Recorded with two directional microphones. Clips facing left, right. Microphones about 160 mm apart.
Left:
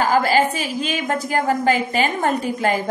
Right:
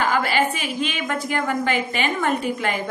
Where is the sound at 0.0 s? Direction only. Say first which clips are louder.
Left 4 dB; 40° left (ahead or behind).